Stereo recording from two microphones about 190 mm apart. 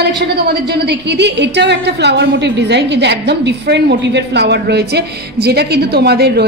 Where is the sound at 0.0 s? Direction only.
60° right (ahead or behind).